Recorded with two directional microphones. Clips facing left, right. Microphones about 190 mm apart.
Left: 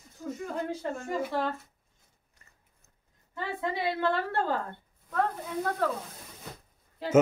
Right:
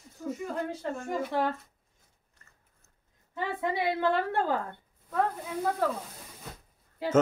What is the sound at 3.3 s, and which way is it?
A woman's voice, 15° right (ahead or behind).